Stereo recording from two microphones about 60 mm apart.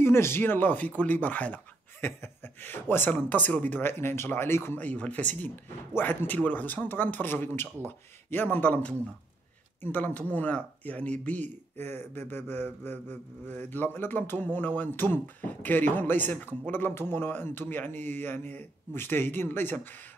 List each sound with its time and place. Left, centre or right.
0.0 s speech: left
4.7 s speech: left